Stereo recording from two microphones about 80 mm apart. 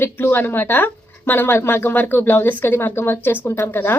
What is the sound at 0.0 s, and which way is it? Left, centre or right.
Speech, left.